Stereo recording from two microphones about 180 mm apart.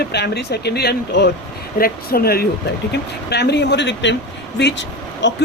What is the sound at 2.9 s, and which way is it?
Speech, 70° left (ahead or behind).